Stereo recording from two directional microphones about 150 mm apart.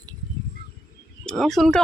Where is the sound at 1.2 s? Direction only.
Centre (ahead or behind).